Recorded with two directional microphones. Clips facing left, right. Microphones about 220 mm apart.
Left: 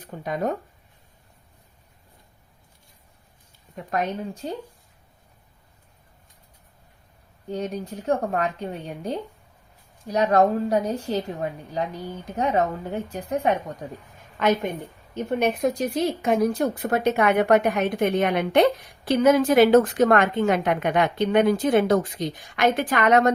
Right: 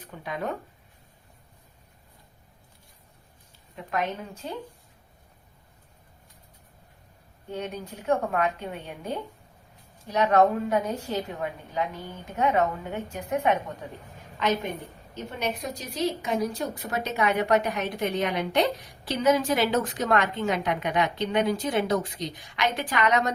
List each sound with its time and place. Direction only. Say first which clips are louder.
0.0 s speech: left 6 dB; 45° left (ahead or behind)
3.8 s a woman's voice: left 3 dB; 40° left (ahead or behind)
7.5 s a woman's voice: left 5 dB; 40° left (ahead or behind)
14.3 s a woman's voice: left 5 dB; 55° left (ahead or behind)